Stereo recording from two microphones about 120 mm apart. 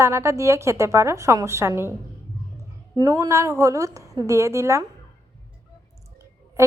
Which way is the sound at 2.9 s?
30° right (ahead or behind).